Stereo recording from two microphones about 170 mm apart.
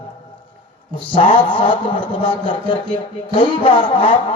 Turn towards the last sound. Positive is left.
turn(degrees=30)  # may be behind; listen again after turning